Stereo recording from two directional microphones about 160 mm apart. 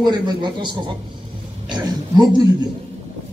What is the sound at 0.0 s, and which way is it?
Speech, 25° right (ahead or behind).